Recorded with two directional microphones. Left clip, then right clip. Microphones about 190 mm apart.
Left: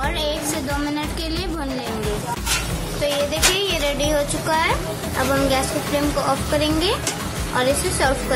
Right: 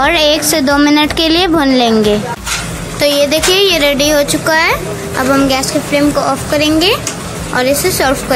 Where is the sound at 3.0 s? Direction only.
30° right (ahead or behind).